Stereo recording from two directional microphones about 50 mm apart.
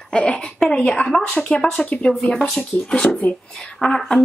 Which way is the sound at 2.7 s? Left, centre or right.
Left.